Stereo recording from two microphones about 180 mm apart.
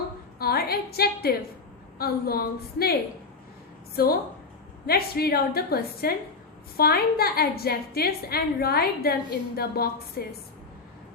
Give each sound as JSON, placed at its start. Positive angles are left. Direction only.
{"t": 0.3, "sound": "a woman's voice", "side_deg": 60}
{"t": 3.9, "sound": "a woman's voice", "side_deg": 55}